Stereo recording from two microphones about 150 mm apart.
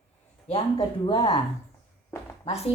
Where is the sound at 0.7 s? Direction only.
25° left (ahead or behind).